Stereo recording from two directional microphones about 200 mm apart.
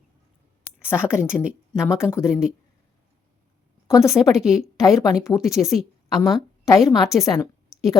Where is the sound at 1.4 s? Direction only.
5° right (ahead or behind).